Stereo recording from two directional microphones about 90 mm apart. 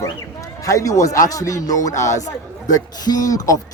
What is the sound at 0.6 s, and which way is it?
A man's voice, 35° left (ahead or behind).